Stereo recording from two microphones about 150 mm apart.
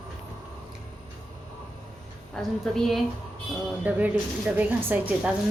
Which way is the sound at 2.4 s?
Centre (ahead or behind).